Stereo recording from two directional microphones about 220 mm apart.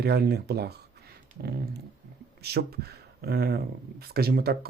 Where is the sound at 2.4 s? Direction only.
45° right (ahead or behind).